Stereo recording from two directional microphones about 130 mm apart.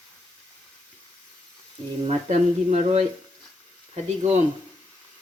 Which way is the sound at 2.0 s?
55° right (ahead or behind).